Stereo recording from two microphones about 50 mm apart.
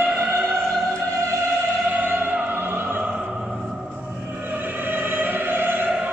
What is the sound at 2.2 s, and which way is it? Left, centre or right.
Opera, right.